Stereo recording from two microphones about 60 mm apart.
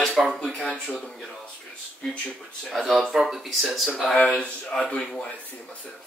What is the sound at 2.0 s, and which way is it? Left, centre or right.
Speech, centre.